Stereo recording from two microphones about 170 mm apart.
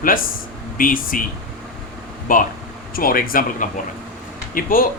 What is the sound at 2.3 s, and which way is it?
Speech, 55° left (ahead or behind).